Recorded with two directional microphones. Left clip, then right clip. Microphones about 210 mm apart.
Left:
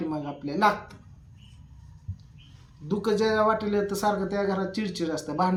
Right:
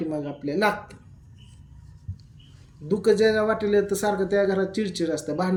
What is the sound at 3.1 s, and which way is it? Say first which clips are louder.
Speech: right 3 dB; 45° left (ahead or behind).